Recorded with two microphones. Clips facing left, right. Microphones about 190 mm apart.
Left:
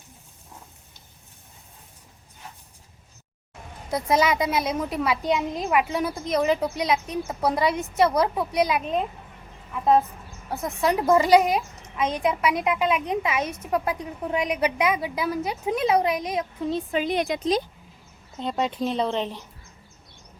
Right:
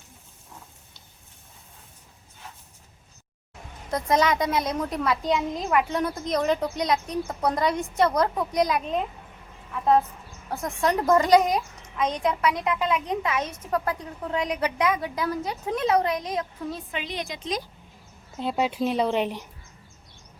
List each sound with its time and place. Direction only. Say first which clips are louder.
3.9 s a child's voice: left 1 dB; 10° left (ahead or behind)
10.5 s a child's voice: left 1 dB; 5° left (ahead or behind)
16.9 s a woman's voice: left 8 dB; 50° left (ahead or behind)
18.3 s speech: right 1 dB; 5° right (ahead or behind)